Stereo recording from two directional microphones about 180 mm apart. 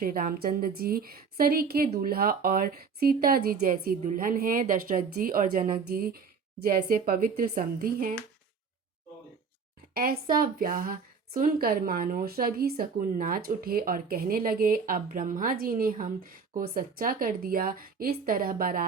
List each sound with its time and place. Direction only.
0.0 s a woman's voice: 55° right (ahead or behind)
9.9 s a woman's voice: 55° right (ahead or behind)